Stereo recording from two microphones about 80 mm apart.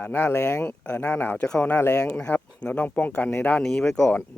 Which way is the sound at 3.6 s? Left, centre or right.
Centre.